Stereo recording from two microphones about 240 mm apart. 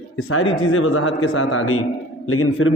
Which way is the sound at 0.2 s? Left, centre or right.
Left.